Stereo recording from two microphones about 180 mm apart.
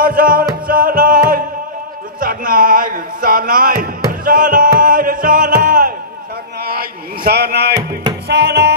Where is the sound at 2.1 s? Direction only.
50° right (ahead or behind).